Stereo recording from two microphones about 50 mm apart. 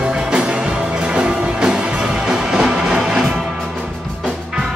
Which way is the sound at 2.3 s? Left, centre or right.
Centre.